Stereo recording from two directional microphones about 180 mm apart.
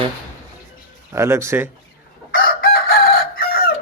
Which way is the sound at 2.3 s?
55° left (ahead or behind).